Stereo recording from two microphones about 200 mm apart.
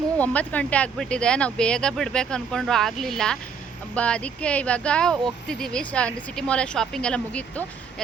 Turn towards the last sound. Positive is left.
turn(degrees=5)  # may be behind; listen again after turning